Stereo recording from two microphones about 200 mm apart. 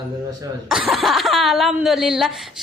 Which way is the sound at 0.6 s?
Centre (ahead or behind).